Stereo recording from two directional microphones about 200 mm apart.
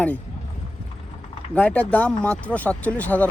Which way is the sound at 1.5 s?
5° left (ahead or behind).